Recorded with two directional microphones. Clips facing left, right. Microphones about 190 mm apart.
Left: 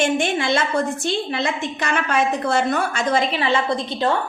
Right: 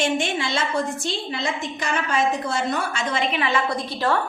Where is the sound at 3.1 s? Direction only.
35° left (ahead or behind).